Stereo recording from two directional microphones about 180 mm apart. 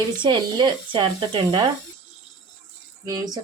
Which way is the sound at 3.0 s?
20° right (ahead or behind).